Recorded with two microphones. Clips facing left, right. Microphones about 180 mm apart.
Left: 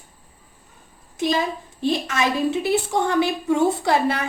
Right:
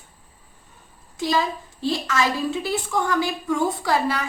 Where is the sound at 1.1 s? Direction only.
20° left (ahead or behind).